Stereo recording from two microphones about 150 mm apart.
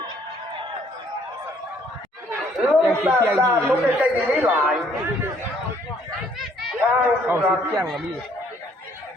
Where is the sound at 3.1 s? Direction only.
15° right (ahead or behind).